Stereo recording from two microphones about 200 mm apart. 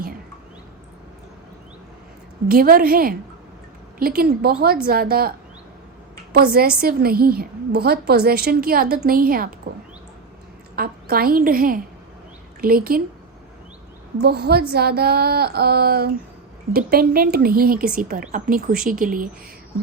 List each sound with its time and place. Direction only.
2.5 s a woman's voice: 50° right (ahead or behind)
6.3 s a woman's voice: 50° right (ahead or behind)
10.8 s a woman's voice: 50° right (ahead or behind)
14.2 s a woman's voice: 55° right (ahead or behind)